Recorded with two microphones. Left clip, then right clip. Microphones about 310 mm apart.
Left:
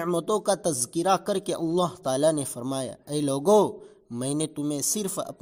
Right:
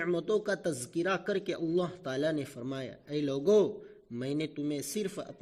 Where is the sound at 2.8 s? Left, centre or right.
Left.